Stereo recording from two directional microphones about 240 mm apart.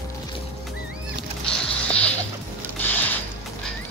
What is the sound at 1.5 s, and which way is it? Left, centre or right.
Music, centre.